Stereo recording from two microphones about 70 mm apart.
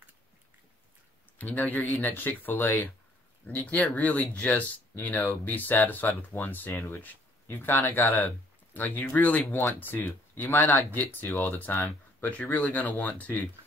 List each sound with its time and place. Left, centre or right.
1.4 s speech: left
3.4 s speech: centre